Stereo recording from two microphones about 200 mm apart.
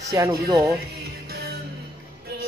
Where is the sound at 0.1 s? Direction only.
15° right (ahead or behind).